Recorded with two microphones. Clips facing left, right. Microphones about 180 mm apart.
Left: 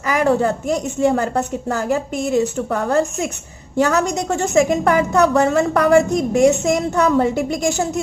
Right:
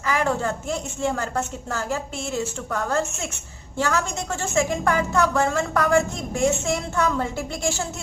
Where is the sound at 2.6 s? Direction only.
30° left (ahead or behind).